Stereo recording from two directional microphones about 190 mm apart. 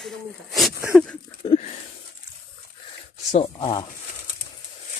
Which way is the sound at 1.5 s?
35° left (ahead or behind).